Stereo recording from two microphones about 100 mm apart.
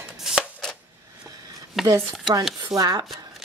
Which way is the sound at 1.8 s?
Centre (ahead or behind).